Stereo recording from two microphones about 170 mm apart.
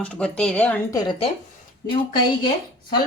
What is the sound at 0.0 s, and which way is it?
Speech, 5° left (ahead or behind).